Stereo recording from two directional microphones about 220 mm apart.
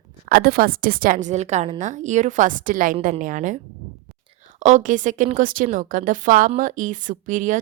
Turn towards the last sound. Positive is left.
turn(degrees=-35)  # may be behind; listen again after turning